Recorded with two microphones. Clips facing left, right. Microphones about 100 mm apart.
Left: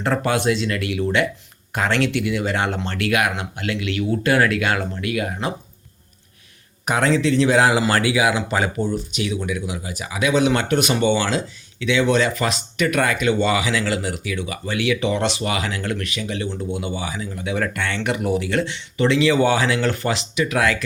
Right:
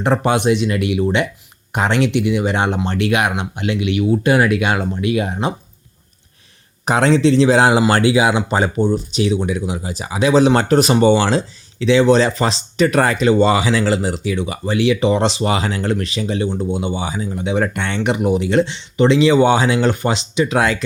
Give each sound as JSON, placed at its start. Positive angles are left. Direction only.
{"t": 0.0, "sound": "speech", "side_deg": -20}
{"t": 6.8, "sound": "speech", "side_deg": -30}